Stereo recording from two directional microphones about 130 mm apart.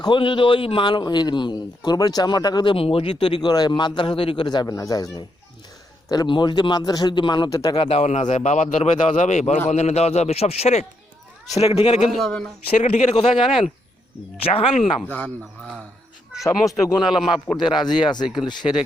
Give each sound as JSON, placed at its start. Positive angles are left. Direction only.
{"t": 0.0, "sound": "a man's voice", "side_deg": 40}
{"t": 2.7, "sound": "a man's voice", "side_deg": 45}
{"t": 7.9, "sound": "a man's voice", "side_deg": 55}
{"t": 12.1, "sound": "a man's voice", "side_deg": 5}
{"t": 12.7, "sound": "a man's voice", "side_deg": 65}
{"t": 13.4, "sound": "speech", "side_deg": 45}
{"t": 15.0, "sound": "speech", "side_deg": 15}
{"t": 16.4, "sound": "a man's voice", "side_deg": 25}